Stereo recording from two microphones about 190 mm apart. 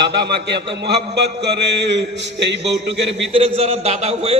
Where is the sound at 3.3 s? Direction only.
30° right (ahead or behind).